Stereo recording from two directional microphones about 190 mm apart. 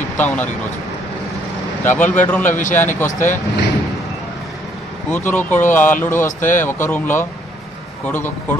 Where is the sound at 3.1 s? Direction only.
40° left (ahead or behind).